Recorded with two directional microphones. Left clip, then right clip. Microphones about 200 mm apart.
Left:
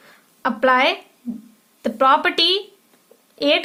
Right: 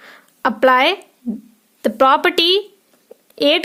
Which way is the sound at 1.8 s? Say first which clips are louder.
Right 3 dB; 45° right (ahead or behind).